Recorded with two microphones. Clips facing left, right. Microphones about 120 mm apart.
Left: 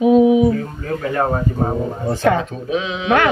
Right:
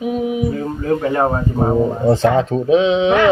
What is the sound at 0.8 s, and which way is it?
Speech, 20° right (ahead or behind).